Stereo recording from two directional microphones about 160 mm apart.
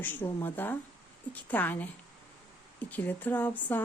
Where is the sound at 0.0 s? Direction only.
10° left (ahead or behind).